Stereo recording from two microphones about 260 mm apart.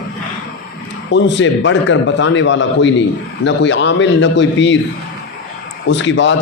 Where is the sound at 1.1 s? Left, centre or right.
Left.